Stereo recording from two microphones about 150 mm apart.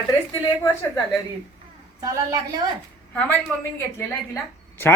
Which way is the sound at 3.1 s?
10° left (ahead or behind).